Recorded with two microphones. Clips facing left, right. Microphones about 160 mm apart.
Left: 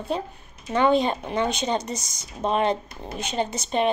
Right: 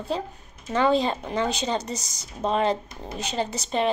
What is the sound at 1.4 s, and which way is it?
Speech, 35° right (ahead or behind).